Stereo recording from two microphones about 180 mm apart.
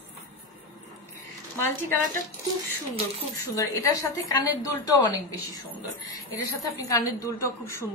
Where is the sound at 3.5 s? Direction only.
15° left (ahead or behind).